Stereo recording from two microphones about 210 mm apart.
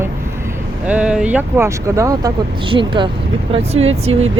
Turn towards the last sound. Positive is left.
turn(degrees=-30)  # may be behind; listen again after turning